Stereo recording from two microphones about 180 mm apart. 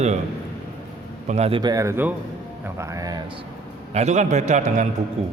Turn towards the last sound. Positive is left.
turn(degrees=-35)  # may be behind; listen again after turning